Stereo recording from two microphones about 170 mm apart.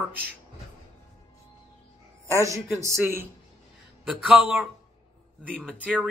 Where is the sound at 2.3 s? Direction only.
20° right (ahead or behind).